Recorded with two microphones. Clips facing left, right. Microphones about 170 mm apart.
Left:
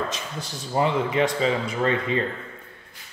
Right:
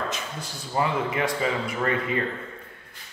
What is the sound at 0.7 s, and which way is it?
Speech, 25° left (ahead or behind).